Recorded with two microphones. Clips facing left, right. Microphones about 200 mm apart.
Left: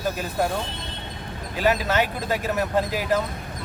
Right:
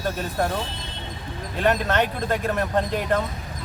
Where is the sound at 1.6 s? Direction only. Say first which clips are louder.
Even; 5° left (ahead or behind).